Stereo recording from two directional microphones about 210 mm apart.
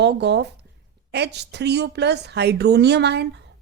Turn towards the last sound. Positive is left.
turn(degrees=-50)  # may be behind; listen again after turning